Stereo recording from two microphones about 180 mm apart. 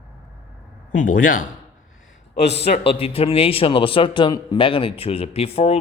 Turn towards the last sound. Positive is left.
turn(degrees=35)  # may be behind; listen again after turning